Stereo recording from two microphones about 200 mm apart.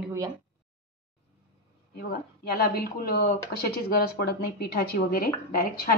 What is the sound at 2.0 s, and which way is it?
A woman's voice, 50° left (ahead or behind).